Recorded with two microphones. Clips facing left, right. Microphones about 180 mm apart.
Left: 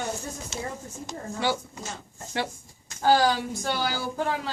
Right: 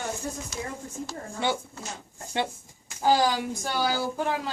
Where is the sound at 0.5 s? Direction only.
25° left (ahead or behind).